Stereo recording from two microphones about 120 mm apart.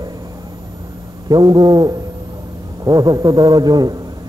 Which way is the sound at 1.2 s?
35° right (ahead or behind).